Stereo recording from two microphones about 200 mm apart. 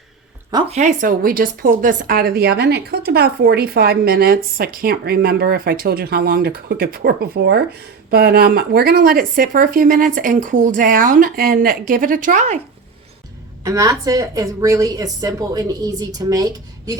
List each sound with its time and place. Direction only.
0.7 s speech: 35° right (ahead or behind)
13.7 s a woman's voice: 15° right (ahead or behind)